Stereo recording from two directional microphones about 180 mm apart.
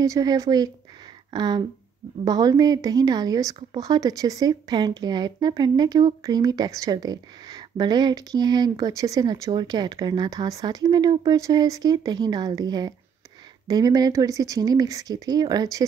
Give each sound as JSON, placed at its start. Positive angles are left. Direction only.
{"t": 0.0, "sound": "speech", "side_deg": -20}